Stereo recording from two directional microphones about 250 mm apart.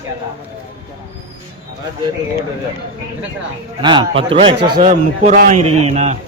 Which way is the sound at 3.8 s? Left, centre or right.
Centre.